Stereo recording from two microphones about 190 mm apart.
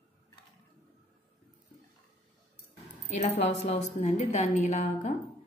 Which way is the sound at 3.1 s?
40° left (ahead or behind).